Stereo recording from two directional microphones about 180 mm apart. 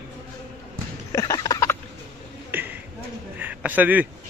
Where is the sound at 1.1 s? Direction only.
20° left (ahead or behind).